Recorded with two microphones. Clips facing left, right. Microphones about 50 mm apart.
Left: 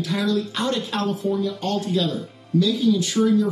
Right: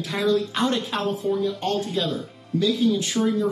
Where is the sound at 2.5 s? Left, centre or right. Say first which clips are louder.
Left 2 dB; right.